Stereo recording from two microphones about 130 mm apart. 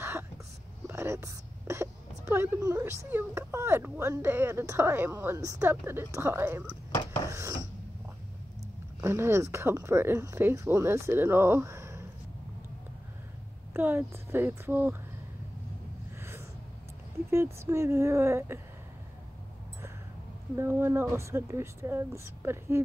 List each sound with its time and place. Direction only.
0.8 s speech: 20° right (ahead or behind)
7.2 s wood: 25° right (ahead or behind)
9.0 s speech: 20° right (ahead or behind)
13.7 s speech: 15° right (ahead or behind)
16.2 s a sound: 20° right (ahead or behind)
17.3 s speech: 20° right (ahead or behind)
20.5 s speech: 20° right (ahead or behind)